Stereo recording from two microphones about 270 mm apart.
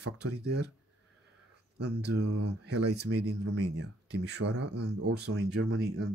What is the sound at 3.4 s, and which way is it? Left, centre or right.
Speech, right.